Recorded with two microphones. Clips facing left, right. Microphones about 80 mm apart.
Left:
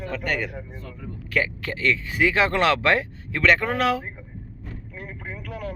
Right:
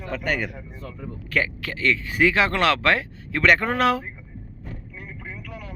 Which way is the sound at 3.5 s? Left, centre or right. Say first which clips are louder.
Right 2 dB; centre.